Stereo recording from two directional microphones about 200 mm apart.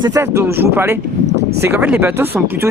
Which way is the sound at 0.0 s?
15° right (ahead or behind).